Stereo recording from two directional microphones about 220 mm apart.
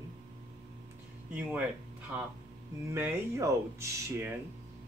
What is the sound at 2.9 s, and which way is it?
Speech, 10° right (ahead or behind).